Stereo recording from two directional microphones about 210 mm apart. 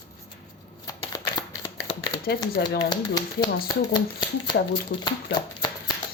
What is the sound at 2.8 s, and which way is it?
Speech, 20° left (ahead or behind).